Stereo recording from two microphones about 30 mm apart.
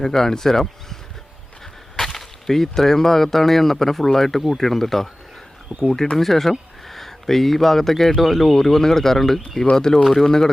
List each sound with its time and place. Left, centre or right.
0.0 s speech: centre
2.0 s speech: centre
6.1 s speech: centre
9.7 s speech: left
10.0 s speech: centre